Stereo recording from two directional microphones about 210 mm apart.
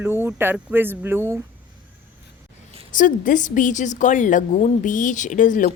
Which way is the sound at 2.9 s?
40° left (ahead or behind).